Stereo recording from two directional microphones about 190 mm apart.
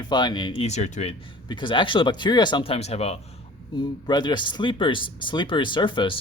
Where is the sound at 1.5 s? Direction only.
25° left (ahead or behind).